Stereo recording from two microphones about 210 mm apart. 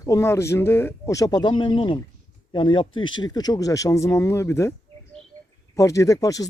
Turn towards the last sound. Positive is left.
turn(degrees=15)  # may be behind; listen again after turning